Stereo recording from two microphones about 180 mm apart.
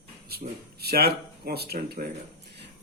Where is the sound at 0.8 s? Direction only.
60° right (ahead or behind).